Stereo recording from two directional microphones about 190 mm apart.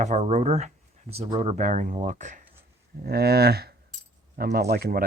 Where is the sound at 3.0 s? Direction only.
55° right (ahead or behind).